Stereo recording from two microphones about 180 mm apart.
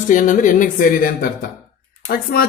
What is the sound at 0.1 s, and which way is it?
Speech, 45° left (ahead or behind).